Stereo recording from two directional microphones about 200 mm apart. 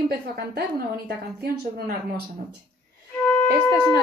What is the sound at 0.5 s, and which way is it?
A woman's voice, 50° right (ahead or behind).